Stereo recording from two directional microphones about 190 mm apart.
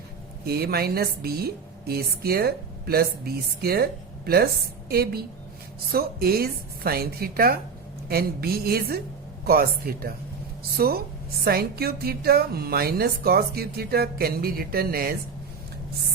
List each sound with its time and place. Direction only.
0.4 s a woman's voice: 55° right (ahead or behind)
4.9 s a woman's voice: 55° right (ahead or behind)